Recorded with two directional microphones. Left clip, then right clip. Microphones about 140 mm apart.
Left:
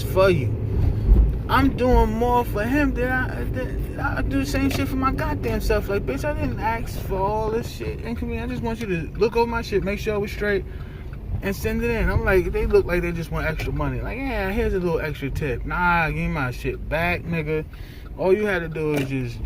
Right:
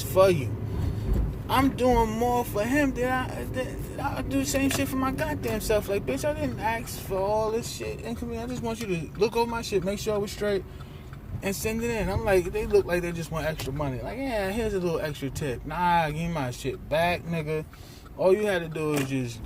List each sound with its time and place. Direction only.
0.1 s speech: 30° right (ahead or behind)
1.5 s speech: 30° right (ahead or behind)